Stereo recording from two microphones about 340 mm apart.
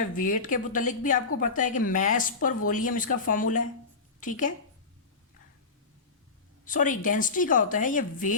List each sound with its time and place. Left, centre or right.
0.0 s speech: left
6.7 s speech: left